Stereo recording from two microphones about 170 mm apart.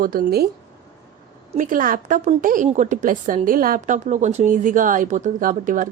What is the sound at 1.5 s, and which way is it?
A woman's voice, 50° right (ahead or behind).